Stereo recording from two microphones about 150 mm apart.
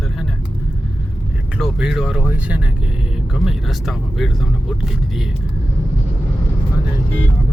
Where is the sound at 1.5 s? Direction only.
5° right (ahead or behind).